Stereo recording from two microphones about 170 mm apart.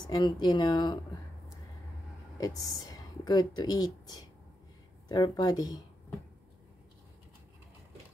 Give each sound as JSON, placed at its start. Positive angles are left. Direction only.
{"t": 0.0, "sound": "speech", "side_deg": 25}
{"t": 2.3, "sound": "speech", "side_deg": 20}